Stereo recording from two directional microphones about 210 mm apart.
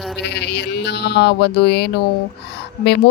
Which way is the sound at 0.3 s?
55° left (ahead or behind).